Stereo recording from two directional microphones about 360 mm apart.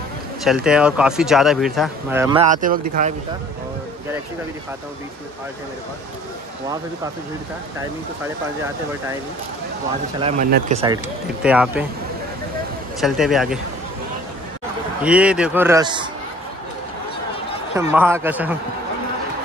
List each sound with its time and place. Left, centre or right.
0.4 s speech: centre; by 3.2 s right
10.2 s speech: right
11.4 s speech: centre
13.0 s speech: centre
15.0 s speech: centre
17.9 s speech: centre